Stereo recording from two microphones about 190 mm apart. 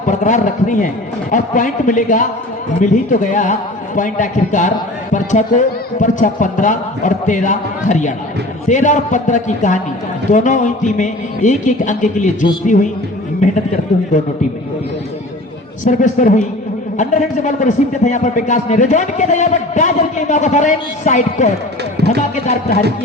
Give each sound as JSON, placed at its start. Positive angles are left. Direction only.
{"t": 0.1, "sound": "a man's voice", "side_deg": 40}
{"t": 15.8, "sound": "a man's voice", "side_deg": 40}
{"t": 21.9, "sound": "a sound", "side_deg": -60}